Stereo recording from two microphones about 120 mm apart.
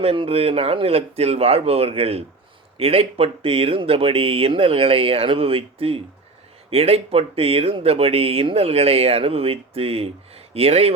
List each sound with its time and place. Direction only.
0.0 s speech: 55° right (ahead or behind)